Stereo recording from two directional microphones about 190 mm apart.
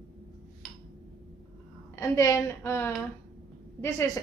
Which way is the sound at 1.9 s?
15° left (ahead or behind).